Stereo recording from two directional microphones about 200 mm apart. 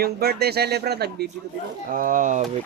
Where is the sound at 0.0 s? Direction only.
50° right (ahead or behind).